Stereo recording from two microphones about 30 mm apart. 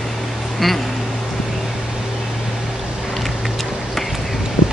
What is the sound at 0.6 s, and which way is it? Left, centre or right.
Speech, centre.